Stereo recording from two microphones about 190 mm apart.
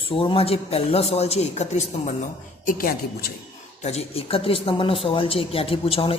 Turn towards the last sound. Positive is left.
turn(degrees=30)  # may be behind; listen again after turning